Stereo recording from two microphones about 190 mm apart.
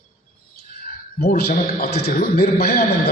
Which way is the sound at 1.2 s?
55° left (ahead or behind).